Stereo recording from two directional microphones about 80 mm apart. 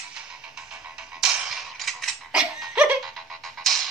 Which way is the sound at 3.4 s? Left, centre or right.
Centre.